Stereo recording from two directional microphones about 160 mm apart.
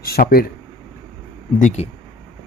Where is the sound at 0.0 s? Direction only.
70° left (ahead or behind).